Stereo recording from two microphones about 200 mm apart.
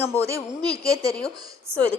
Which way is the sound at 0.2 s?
15° right (ahead or behind).